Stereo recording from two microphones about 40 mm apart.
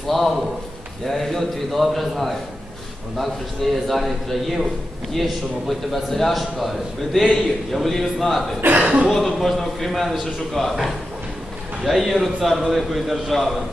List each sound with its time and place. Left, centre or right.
0.1 s a man's voice: centre
8.7 s speech: right
9.0 s a man's voice: centre